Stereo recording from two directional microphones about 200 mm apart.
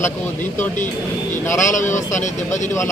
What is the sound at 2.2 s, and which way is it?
Speech, 35° left (ahead or behind).